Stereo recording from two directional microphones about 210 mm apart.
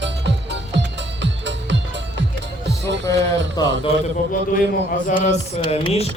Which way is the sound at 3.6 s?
20° left (ahead or behind).